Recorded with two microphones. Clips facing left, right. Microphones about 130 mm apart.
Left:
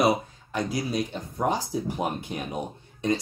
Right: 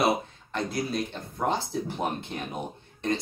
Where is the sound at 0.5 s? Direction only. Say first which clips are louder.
Left 2 dB; 10° left (ahead or behind).